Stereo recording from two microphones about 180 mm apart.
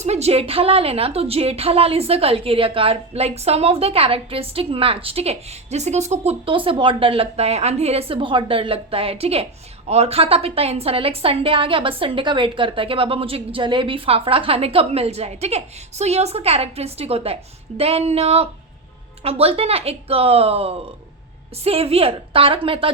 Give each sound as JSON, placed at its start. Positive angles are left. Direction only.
{"t": 0.0, "sound": "a woman's voice", "side_deg": -35}